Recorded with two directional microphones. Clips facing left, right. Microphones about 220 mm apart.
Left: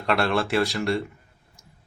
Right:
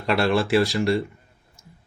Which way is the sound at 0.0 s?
Centre (ahead or behind).